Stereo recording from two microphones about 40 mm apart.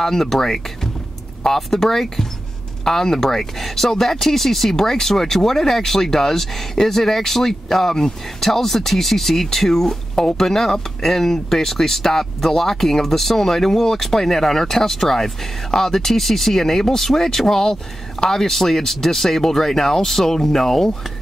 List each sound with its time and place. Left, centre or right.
0.0 s speech: centre